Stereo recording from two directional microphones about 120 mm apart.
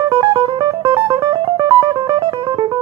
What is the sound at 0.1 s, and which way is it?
Music, 40° right (ahead or behind).